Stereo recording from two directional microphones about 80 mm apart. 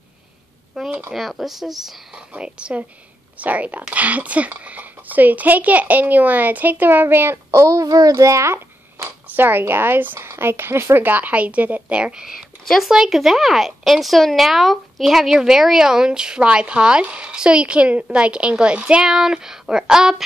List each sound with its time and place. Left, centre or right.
0.8 s a sound: centre
1.1 s speech: centre; by 9.1 s right
9.3 s speech: right; by 20.2 s centre